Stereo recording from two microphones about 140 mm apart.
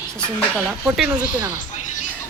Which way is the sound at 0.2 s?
5° right (ahead or behind).